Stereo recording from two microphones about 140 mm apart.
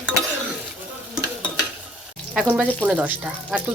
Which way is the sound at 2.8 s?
10° right (ahead or behind).